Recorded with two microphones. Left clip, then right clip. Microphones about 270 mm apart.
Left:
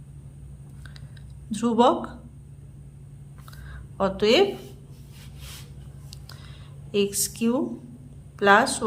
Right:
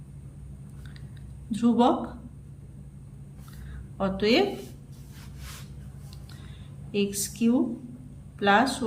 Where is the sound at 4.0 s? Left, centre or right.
Centre.